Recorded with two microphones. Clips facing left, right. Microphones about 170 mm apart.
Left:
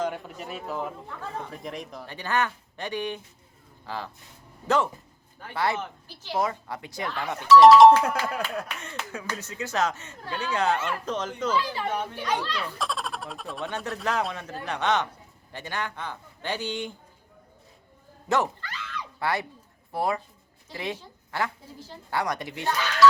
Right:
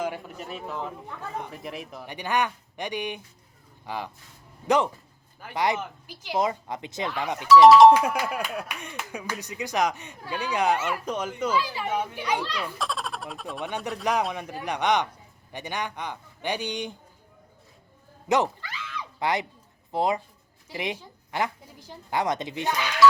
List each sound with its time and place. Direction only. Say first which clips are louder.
0.0 s a sound: left 1 dB; 5° right (ahead or behind)
1.0 s speech: right 1 dB; 15° right (ahead or behind)
1.5 s speech: even; 5° right (ahead or behind)
7.4 s speech: even; centre (ahead or behind)
7.9 s speech: even; 10° right (ahead or behind)
12.8 s speech: even; centre (ahead or behind)
13.6 s speech: right 1 dB; 15° right (ahead or behind)
18.3 s bow-wow: right 2 dB; 15° right (ahead or behind)
19.9 s speech: right 2 dB; 20° right (ahead or behind)